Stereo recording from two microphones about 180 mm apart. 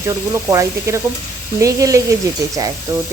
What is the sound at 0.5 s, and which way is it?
Speech, 15° right (ahead or behind).